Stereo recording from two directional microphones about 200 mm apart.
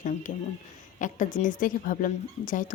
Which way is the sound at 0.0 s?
40° left (ahead or behind).